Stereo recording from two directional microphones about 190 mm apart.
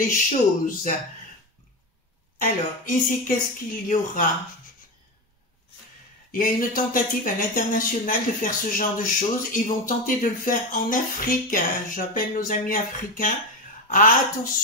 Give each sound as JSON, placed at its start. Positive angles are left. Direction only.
{"t": 0.0, "sound": "speech", "side_deg": 45}
{"t": 2.4, "sound": "speech", "side_deg": 45}
{"t": 6.3, "sound": "speech", "side_deg": 45}